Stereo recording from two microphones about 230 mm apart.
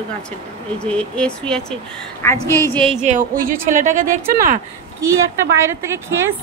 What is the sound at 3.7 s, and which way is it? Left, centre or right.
Speech, right.